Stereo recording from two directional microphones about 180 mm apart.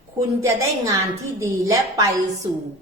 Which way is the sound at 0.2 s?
15° right (ahead or behind).